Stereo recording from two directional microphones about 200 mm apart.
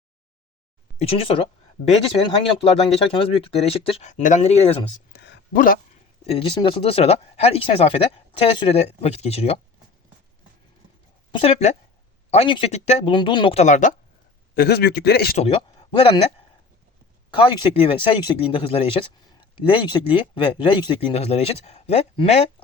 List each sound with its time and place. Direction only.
0.9 s speech: 30° left (ahead or behind)
5.1 s a sound: 60° left (ahead or behind)
5.5 s a man's voice: 45° left (ahead or behind)
6.2 s speech: 25° left (ahead or behind)
11.3 s speech: 25° left (ahead or behind)
14.5 s a man's voice: 55° left (ahead or behind)
15.4 s speech: 25° left (ahead or behind)
17.3 s speech: 25° left (ahead or behind)